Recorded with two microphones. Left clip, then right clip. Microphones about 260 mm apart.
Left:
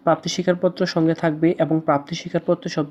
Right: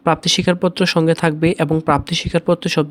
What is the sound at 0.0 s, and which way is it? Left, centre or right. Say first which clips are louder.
Speech: right 4 dB; right.